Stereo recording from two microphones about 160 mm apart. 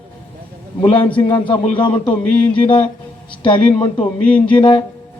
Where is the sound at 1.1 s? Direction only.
30° left (ahead or behind).